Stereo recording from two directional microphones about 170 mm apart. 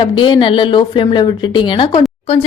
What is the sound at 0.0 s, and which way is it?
A woman's voice, 30° left (ahead or behind).